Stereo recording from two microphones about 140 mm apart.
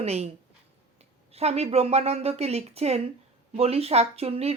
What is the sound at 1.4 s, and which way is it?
Speech, 50° right (ahead or behind).